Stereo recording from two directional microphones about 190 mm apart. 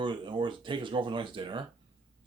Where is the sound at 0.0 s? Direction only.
25° right (ahead or behind).